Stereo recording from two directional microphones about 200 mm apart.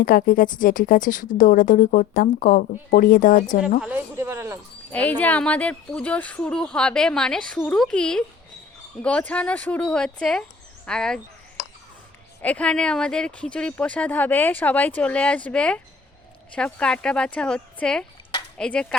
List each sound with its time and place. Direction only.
0.0 s a woman's voice: 45° left (ahead or behind)
3.8 s speech: 10° right (ahead or behind)
4.9 s speech: 10° left (ahead or behind)
12.4 s speech: 5° left (ahead or behind)